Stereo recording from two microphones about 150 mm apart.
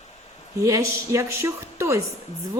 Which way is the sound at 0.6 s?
25° right (ahead or behind).